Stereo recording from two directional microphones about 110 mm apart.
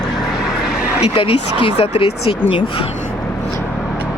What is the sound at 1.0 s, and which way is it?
Speech, 55° left (ahead or behind).